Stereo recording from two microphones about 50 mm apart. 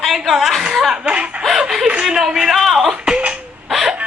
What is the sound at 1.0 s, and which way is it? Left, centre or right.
Chicken, right.